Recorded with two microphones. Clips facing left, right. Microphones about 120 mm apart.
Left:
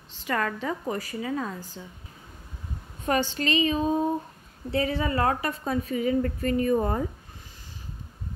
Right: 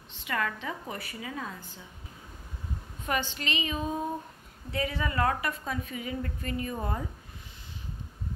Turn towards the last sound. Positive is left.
turn(degrees=45)  # may be behind; listen again after turning